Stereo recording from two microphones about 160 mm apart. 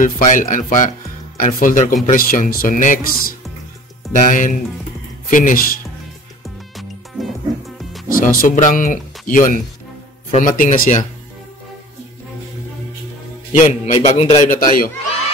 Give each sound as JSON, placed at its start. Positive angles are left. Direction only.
{"t": 0.0, "sound": "speech", "side_deg": 55}
{"t": 4.1, "sound": "a man's voice", "side_deg": 55}
{"t": 6.8, "sound": "music", "side_deg": 0}
{"t": 8.1, "sound": "speech", "side_deg": 65}
{"t": 13.6, "sound": "a man's voice", "side_deg": 45}
{"t": 14.4, "sound": "speech", "side_deg": 55}